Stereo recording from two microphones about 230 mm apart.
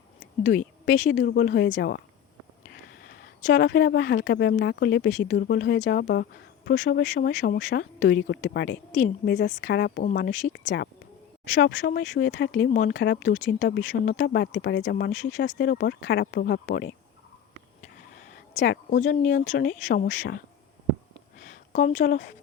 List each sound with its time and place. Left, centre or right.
0.4 s speech: left
3.1 s speech: left
18.5 s speech: left
21.4 s speech: left